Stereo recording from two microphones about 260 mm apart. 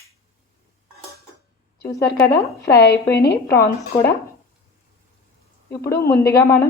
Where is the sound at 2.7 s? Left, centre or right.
Left.